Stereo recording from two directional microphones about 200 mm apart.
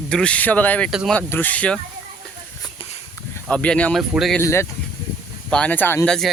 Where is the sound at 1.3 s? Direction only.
10° left (ahead or behind).